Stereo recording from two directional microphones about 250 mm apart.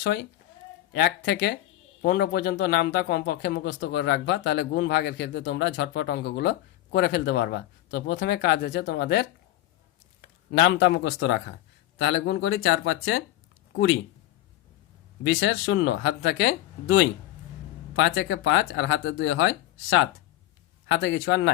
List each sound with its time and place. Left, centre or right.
0.0 s a man's voice: left
10.5 s speech: left
15.2 s speech: left